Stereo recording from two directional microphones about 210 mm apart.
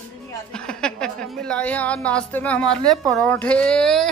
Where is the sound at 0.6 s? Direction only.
5° left (ahead or behind).